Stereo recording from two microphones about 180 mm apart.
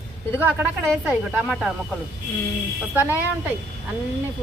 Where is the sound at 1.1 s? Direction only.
5° right (ahead or behind).